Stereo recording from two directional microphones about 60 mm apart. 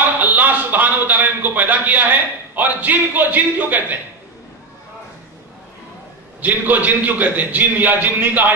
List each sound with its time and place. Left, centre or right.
0.2 s a man's voice: right
6.4 s a man's voice: right